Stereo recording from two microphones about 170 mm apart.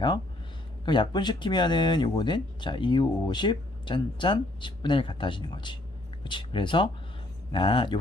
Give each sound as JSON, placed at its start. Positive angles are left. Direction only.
{"t": 0.9, "sound": "speech", "side_deg": 25}